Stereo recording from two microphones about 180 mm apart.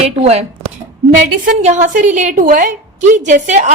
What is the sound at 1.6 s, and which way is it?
A woman's voice, 40° right (ahead or behind).